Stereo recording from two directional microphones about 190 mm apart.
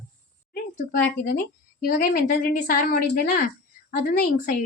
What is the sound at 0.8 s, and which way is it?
A woman's voice, 50° left (ahead or behind).